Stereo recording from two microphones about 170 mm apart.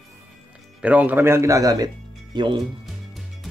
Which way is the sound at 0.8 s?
10° right (ahead or behind).